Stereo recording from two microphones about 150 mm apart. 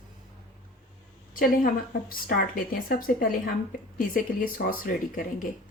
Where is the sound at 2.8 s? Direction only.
75° left (ahead or behind).